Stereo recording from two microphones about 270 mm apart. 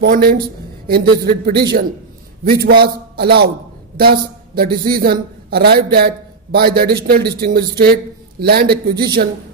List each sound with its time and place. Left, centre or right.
0.0 s a man's voice: right